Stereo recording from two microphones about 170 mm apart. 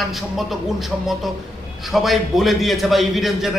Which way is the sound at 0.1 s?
Centre (ahead or behind).